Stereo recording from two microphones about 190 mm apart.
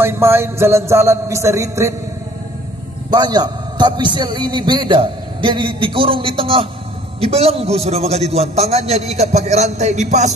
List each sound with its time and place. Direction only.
0.0 s a man's voice: 15° right (ahead or behind)
3.1 s a man's voice: 20° right (ahead or behind); by 10.3 s 40° right (ahead or behind)